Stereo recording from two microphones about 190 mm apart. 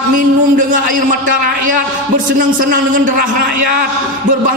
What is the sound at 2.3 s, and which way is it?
Speech, 45° right (ahead or behind).